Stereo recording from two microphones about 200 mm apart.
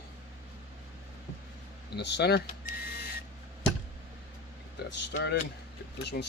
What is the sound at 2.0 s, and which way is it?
Speech, 55° left (ahead or behind).